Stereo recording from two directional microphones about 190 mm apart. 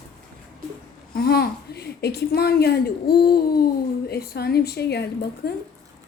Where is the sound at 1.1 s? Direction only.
55° left (ahead or behind).